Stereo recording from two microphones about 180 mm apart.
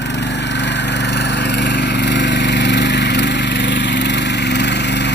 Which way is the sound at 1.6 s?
70° left (ahead or behind).